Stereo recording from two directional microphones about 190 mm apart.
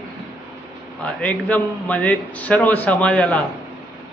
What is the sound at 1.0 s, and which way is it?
A man's voice, 5° left (ahead or behind).